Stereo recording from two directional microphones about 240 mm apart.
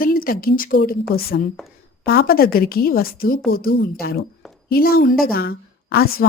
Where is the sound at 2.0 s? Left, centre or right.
Left.